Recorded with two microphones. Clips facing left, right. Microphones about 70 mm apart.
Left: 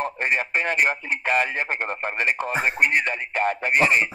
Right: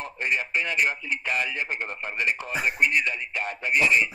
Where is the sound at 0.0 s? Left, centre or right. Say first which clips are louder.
Left 4 dB; left.